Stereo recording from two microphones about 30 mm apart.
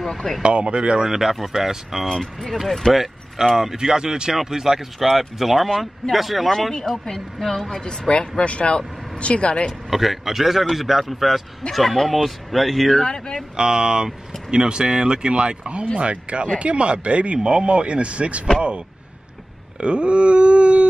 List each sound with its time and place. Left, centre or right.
0.0 s speech: centre
0.4 s speech: right
1.5 s a man's voice: centre
2.1 s speech: centre
2.9 s a man's voice: centre
4.9 s speech: centre
6.7 s speech: left
8.1 s speech: left
8.5 s speech: left
9.8 s a man's voice: centre
13.0 s speech: left
13.6 s speech: right
15.6 s speech: right
19.8 s speech: right